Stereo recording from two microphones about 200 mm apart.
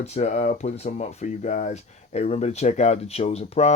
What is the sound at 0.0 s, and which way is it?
Speech, 35° left (ahead or behind).